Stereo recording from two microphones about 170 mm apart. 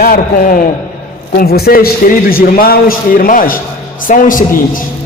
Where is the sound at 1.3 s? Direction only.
65° left (ahead or behind).